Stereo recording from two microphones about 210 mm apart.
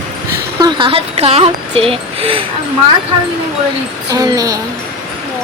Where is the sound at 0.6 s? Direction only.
25° right (ahead or behind).